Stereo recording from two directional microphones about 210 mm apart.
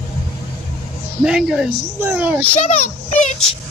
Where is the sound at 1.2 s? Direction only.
5° right (ahead or behind).